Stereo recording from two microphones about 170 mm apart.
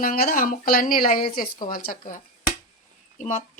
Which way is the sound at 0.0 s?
60° left (ahead or behind).